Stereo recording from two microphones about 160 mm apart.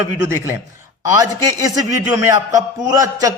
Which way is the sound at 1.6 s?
20° right (ahead or behind).